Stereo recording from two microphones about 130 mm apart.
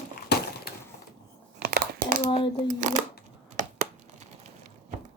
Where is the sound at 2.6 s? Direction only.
70° right (ahead or behind).